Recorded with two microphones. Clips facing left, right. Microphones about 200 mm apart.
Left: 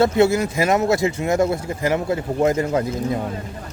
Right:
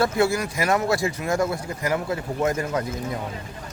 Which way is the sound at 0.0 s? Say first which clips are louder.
Left 5 dB; 25° left (ahead or behind).